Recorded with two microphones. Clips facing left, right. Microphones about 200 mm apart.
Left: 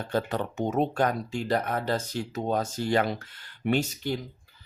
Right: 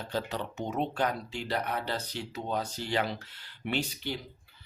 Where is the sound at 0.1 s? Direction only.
55° left (ahead or behind).